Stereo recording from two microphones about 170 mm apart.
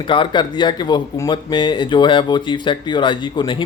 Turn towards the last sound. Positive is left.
turn(degrees=30)  # may be behind; listen again after turning